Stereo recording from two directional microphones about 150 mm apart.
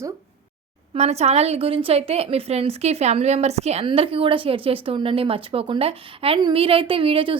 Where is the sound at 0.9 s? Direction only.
45° right (ahead or behind).